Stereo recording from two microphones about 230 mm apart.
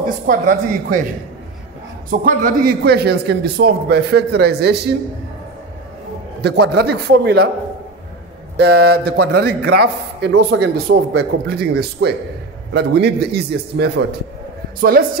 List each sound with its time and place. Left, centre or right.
0.3 s a man's voice: right
2.0 s a man's voice: right
6.4 s a man's voice: right
8.5 s a man's voice: right